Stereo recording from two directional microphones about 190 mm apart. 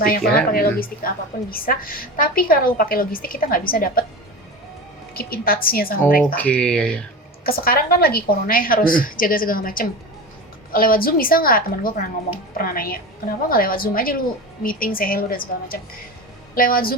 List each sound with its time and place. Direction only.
0.5 s a woman's voice: 50° left (ahead or behind)
5.1 s a woman's voice: 50° left (ahead or behind)
6.3 s speech: 5° left (ahead or behind)
7.4 s a woman's voice: 50° left (ahead or behind)